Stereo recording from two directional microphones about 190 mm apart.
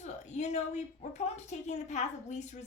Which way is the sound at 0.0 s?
35° left (ahead or behind).